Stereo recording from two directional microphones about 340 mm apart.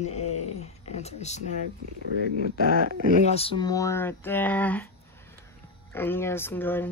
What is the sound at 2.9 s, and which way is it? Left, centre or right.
Speech, right.